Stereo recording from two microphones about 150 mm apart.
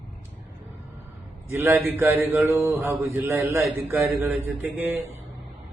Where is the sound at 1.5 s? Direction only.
15° right (ahead or behind).